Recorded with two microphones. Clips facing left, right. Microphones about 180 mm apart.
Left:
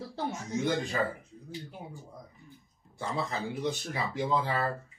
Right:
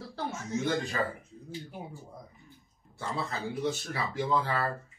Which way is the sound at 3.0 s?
15° left (ahead or behind).